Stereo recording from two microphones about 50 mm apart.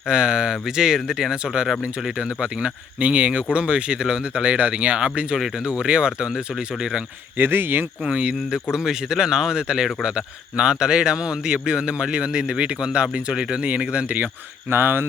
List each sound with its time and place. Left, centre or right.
0.1 s speech: centre
7.3 s speech: right
8.0 s speech: right
8.7 s speech: centre; by 14.3 s right
14.7 s speech: right